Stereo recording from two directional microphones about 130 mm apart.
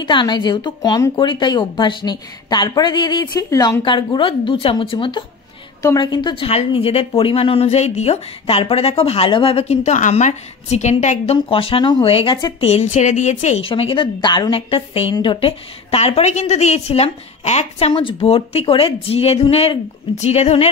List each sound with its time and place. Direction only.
0.0 s a woman's voice: 35° left (ahead or behind); by 11.3 s 65° left (ahead or behind)
11.3 s a woman's voice: 45° left (ahead or behind)
12.4 s speech: 35° left (ahead or behind)
12.6 s a woman's voice: 60° left (ahead or behind)
13.7 s a woman's voice: 45° left (ahead or behind)